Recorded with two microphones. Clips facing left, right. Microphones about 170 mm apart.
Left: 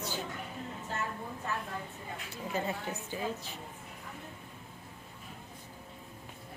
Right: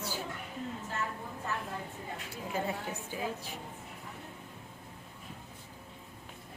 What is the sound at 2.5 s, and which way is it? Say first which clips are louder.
Speech: even; 10° right (ahead or behind).